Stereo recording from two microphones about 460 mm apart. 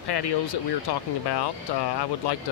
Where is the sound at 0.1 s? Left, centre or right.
Left.